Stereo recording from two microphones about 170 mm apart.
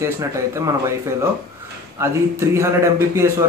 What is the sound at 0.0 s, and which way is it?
A man's voice, 15° right (ahead or behind).